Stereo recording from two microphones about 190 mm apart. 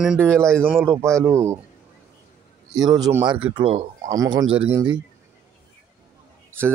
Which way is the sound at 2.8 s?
20° right (ahead or behind).